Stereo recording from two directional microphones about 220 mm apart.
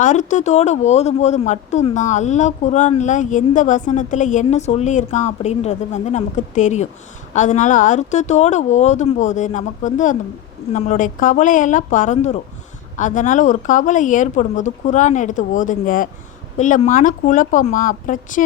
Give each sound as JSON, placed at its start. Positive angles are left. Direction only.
{"t": 0.0, "sound": "speech", "side_deg": 35}